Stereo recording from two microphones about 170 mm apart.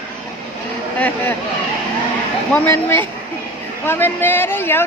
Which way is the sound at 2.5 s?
15° left (ahead or behind).